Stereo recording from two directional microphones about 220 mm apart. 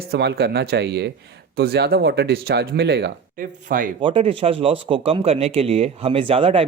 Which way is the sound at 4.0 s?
25° right (ahead or behind).